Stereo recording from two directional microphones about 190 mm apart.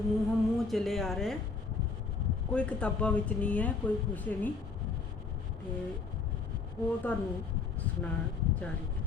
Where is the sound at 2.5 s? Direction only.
5° left (ahead or behind).